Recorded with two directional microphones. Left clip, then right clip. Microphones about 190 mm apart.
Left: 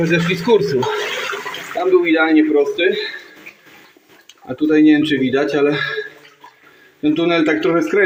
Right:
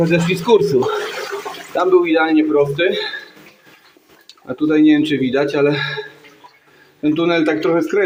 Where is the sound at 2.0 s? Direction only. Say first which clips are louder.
Left 1 dB; 10° right (ahead or behind).